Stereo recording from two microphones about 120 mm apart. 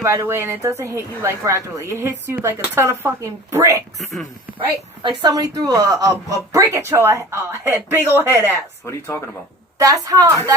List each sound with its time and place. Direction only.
0.0 s a woman's voice: 25° right (ahead or behind)
5.2 s a woman's voice: 30° right (ahead or behind)
8.9 s speech: 20° left (ahead or behind)
9.7 s a woman's voice: 30° right (ahead or behind)